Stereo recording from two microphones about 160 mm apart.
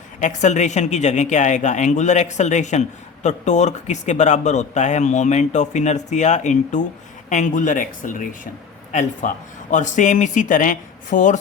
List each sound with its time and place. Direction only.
0.2 s speech: 50° left (ahead or behind)